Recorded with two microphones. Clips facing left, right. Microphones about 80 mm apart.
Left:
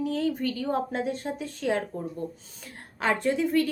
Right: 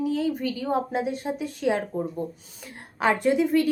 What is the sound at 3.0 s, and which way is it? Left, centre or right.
Speech, centre.